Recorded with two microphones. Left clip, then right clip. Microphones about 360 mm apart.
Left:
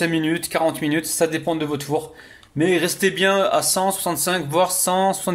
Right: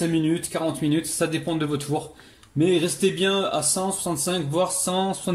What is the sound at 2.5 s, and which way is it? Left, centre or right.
Speech, left.